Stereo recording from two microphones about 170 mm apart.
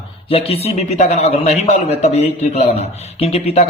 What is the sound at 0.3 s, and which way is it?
A man's voice, 35° left (ahead or behind).